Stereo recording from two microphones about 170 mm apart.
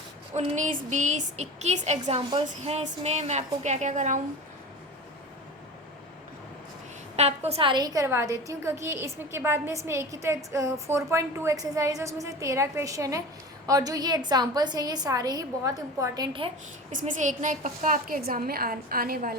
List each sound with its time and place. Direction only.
0.3 s a woman's voice: 45° right (ahead or behind)
7.2 s a woman's voice: 40° right (ahead or behind)
16.9 s a woman's voice: 45° right (ahead or behind)